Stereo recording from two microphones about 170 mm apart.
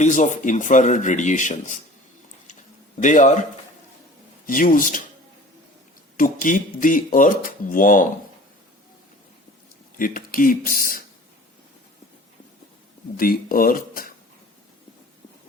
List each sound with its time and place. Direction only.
0.0 s speech: 45° left (ahead or behind)
2.5 s a sound: 45° left (ahead or behind)
4.4 s speech: 55° left (ahead or behind)
6.1 s speech: 50° left (ahead or behind)
10.0 s speech: 55° left (ahead or behind)
13.1 s speech: 60° left (ahead or behind)